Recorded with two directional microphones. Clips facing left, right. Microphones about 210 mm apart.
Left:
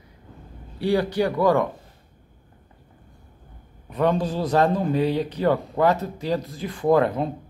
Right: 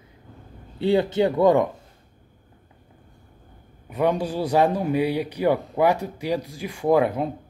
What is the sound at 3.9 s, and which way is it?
A man's voice, 10° right (ahead or behind).